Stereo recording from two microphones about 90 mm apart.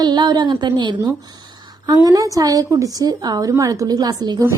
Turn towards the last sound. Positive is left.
turn(degrees=-50)  # may be behind; listen again after turning